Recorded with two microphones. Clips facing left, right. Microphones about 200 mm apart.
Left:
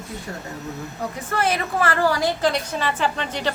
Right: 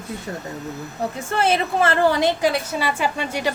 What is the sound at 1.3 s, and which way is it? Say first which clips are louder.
A woman's voice: right 3 dB; 25° right (ahead or behind).